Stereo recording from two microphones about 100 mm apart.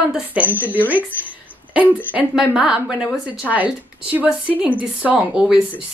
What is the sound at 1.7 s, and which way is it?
A woman's voice, 15° right (ahead or behind).